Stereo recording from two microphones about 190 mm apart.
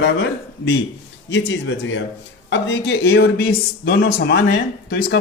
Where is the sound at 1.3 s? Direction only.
70° left (ahead or behind).